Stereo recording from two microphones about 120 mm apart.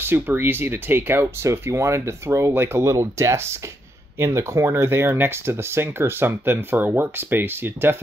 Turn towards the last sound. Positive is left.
turn(degrees=-20)  # may be behind; listen again after turning